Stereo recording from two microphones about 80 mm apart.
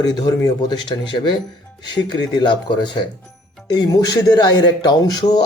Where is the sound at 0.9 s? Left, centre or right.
Left.